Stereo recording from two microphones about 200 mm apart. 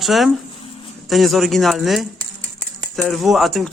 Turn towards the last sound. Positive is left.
turn(degrees=0)  # may be behind; listen again after turning